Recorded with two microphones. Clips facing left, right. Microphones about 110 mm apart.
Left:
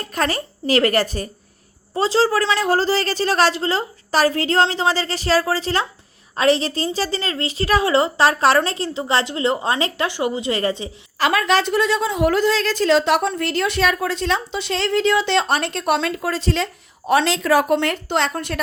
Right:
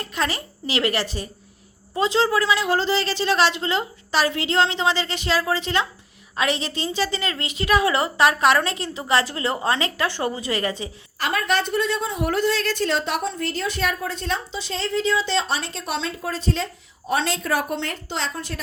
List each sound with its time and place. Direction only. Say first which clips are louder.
0.0 s a woman's voice: left 4 dB; 45° left (ahead or behind)
1.9 s a woman's voice: left 3 dB; 35° left (ahead or behind)
10.1 s a woman's voice: left 4 dB; 15° left (ahead or behind)
11.2 s a woman's voice: left 5 dB; 90° left; by 18.6 s 65° left (ahead or behind)